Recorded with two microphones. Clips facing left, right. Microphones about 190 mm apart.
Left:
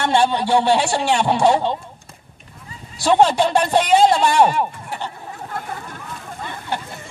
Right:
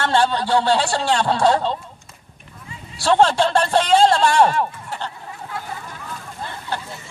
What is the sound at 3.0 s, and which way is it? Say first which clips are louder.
A man's voice: left 1 dB; 15° left (ahead or behind).